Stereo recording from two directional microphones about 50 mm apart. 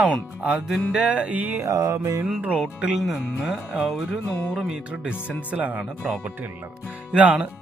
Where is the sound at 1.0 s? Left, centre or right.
Right.